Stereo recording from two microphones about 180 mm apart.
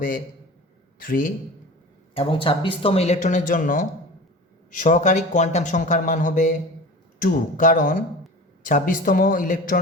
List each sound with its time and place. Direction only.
0.9 s a man's voice: 50° left (ahead or behind)
2.1 s speech: 30° left (ahead or behind); by 9.8 s 50° left (ahead or behind)